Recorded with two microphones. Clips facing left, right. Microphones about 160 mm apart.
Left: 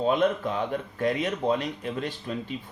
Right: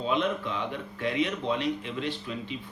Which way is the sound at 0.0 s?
45° left (ahead or behind).